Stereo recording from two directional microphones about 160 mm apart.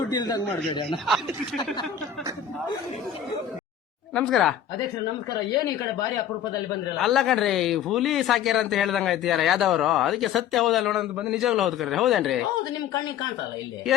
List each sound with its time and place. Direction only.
0.1 s speech: 25° left (ahead or behind)
4.1 s speech: 5° left (ahead or behind)
7.0 s speech: centre (ahead or behind)